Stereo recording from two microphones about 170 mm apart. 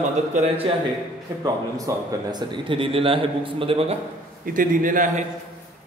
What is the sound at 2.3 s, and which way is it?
A man's voice, 30° right (ahead or behind).